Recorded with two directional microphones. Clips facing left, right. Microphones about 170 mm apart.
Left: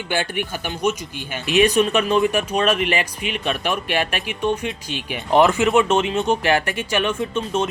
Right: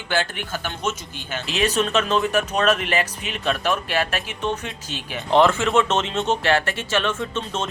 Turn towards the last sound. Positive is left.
turn(degrees=15)  # may be behind; listen again after turning